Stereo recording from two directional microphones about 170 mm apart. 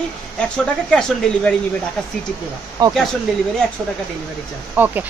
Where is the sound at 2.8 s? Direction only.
25° right (ahead or behind).